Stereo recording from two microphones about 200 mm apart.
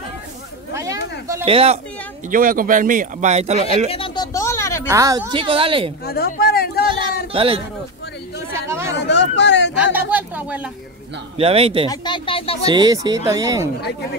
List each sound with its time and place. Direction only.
0.7 s a sound: 15° right (ahead or behind)
1.5 s speech: 30° right (ahead or behind)
2.2 s speech: 45° right (ahead or behind)
3.9 s a sound: 25° left (ahead or behind)
4.8 s speech: 15° right (ahead or behind)
6.0 s a sound: 50° left (ahead or behind)
7.3 s speech: 25° right (ahead or behind)
8.6 s chatter: 15° right (ahead or behind)
8.9 s speech: 60° left (ahead or behind)
9.9 s speech: 10° right (ahead or behind)
11.3 s speech: 30° right (ahead or behind)
11.9 s a sound: 20° left (ahead or behind)
12.6 s speech: 20° right (ahead or behind)